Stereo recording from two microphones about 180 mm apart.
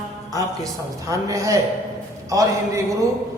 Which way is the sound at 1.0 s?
20° right (ahead or behind).